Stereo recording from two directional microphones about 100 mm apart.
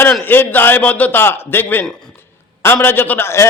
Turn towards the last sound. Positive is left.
turn(degrees=25)  # may be behind; listen again after turning